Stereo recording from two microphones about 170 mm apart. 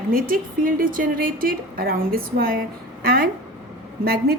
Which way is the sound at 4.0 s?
65° right (ahead or behind).